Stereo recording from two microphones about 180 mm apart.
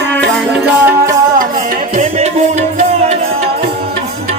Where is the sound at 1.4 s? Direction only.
45° right (ahead or behind).